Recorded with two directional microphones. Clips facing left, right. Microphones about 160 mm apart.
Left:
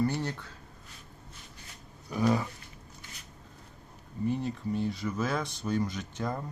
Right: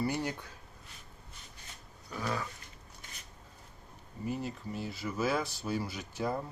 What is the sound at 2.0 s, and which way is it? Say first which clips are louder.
Dog: left 9 dB; 15° left (ahead or behind).